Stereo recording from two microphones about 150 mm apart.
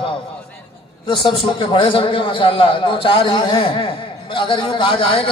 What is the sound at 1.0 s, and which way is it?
A man's voice, 35° left (ahead or behind).